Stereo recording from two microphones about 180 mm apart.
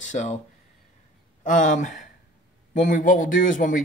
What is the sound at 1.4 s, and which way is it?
Speech, 45° left (ahead or behind).